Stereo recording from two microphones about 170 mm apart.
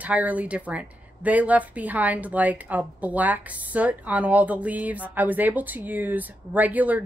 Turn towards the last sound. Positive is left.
turn(degrees=-10)  # may be behind; listen again after turning